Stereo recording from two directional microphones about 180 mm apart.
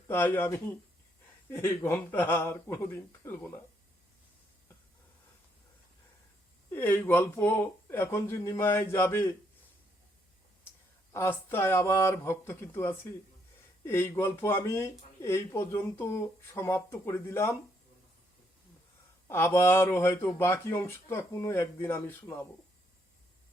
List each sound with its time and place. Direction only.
0.1 s speech: 10° left (ahead or behind)
6.7 s speech: 10° left (ahead or behind)
11.1 s speech: 15° left (ahead or behind)
19.3 s speech: 15° left (ahead or behind)